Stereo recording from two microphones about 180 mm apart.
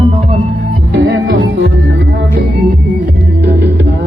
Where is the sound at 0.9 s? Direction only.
65° right (ahead or behind).